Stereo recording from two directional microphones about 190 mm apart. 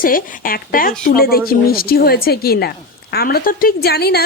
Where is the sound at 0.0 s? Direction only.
50° left (ahead or behind).